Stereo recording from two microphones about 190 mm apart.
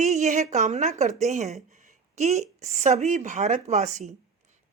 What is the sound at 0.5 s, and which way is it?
A woman's voice, 40° right (ahead or behind).